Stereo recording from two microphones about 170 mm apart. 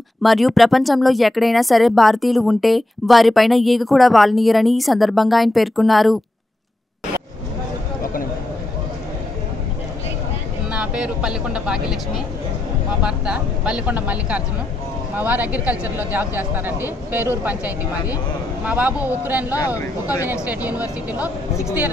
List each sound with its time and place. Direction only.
0.2 s a woman's voice: centre (ahead or behind)
10.7 s speech: 5° right (ahead or behind)
13.0 s speech: 5° right (ahead or behind)
19.5 s speech: 20° left (ahead or behind)
20.4 s speech: 10° right (ahead or behind)